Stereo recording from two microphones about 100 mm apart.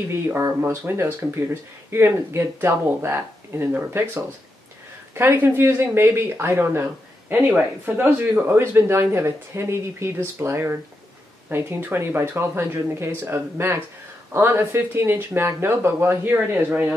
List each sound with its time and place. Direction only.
0.1 s speech: 25° right (ahead or behind)